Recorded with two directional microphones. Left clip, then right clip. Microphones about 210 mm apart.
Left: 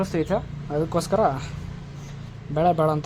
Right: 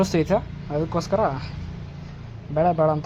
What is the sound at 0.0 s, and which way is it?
Speech, 15° right (ahead or behind).